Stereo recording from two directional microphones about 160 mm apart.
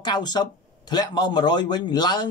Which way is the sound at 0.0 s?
25° left (ahead or behind).